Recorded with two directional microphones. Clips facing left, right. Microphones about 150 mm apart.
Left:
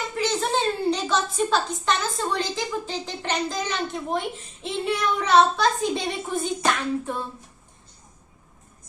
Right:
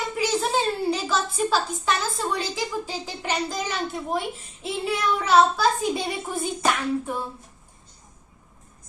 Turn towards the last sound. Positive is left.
turn(degrees=-10)  # may be behind; listen again after turning